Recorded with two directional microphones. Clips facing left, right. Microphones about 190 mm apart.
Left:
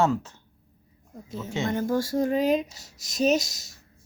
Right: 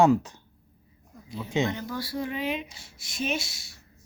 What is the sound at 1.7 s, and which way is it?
A child's voice, 45° left (ahead or behind).